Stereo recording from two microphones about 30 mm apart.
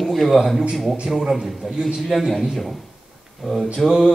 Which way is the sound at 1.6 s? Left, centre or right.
Centre.